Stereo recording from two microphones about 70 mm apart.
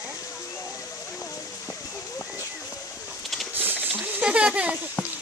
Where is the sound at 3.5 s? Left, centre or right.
Right.